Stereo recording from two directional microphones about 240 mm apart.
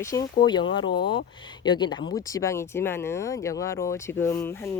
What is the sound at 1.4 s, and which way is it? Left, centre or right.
Speech, centre.